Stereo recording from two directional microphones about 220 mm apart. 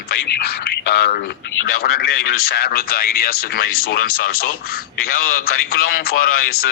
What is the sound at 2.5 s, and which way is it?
Speech, 45° left (ahead or behind).